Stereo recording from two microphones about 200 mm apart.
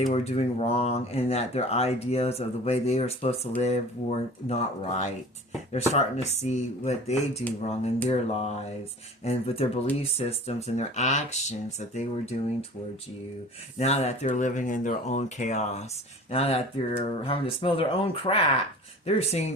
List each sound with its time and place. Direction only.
0.1 s speech: 30° left (ahead or behind)
13.7 s speech: 30° left (ahead or behind)